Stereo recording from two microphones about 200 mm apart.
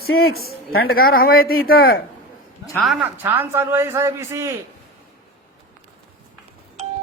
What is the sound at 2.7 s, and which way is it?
A man's voice, centre (ahead or behind).